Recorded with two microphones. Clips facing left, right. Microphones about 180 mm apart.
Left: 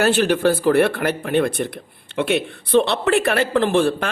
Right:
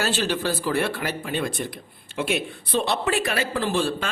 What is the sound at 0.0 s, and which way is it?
Speech, 55° left (ahead or behind).